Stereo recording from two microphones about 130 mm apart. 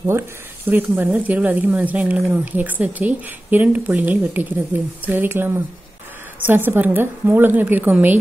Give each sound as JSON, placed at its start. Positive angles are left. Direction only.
{"t": 0.7, "sound": "speech", "side_deg": -15}